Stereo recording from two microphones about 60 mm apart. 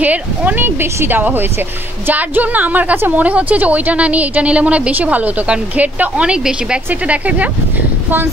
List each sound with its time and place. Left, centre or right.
0.0 s a woman's voice: right
0.7 s a woman's voice: right; by 6.8 s centre
6.9 s a woman's voice: right